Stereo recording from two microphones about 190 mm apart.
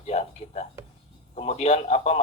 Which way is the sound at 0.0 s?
35° left (ahead or behind).